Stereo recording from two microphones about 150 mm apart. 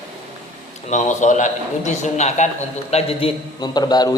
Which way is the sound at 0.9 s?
55° left (ahead or behind).